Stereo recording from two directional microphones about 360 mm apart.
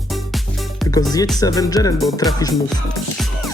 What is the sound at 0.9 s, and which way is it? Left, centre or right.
Speech, centre.